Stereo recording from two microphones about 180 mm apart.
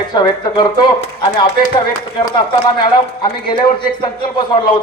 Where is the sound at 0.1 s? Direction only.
25° left (ahead or behind).